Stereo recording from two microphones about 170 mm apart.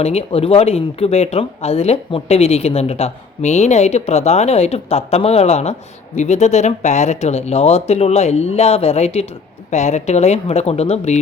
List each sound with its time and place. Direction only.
0.0 s speech: 35° left (ahead or behind)